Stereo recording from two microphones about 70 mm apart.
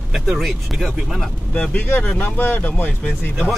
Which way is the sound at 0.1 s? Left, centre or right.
Centre.